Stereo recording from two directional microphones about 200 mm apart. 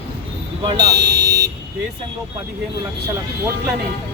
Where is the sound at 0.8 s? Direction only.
55° right (ahead or behind).